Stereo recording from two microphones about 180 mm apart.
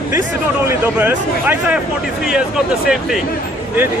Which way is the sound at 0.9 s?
10° right (ahead or behind).